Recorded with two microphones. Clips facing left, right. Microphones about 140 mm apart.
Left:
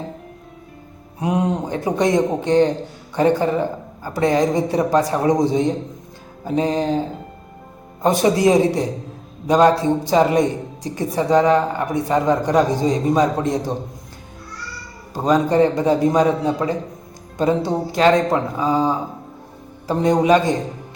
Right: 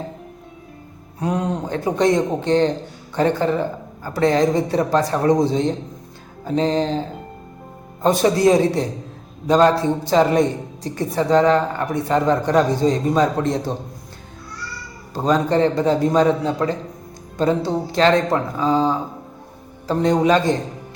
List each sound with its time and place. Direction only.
1.2 s a woman's voice: 20° left (ahead or behind)
8.0 s a woman's voice: 15° left (ahead or behind)
15.1 s a woman's voice: 10° left (ahead or behind)